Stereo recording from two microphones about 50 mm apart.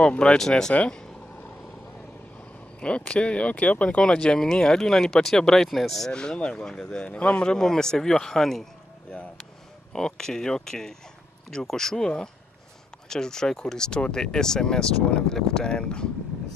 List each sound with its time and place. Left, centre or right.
0.0 s speech: centre
2.8 s speech: left; by 6.1 s centre
6.1 s speech: centre
9.9 s speech: centre